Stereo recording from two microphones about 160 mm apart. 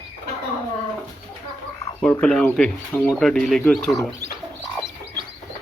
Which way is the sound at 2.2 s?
5° left (ahead or behind).